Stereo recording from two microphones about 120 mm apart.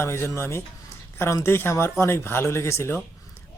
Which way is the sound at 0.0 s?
20° left (ahead or behind).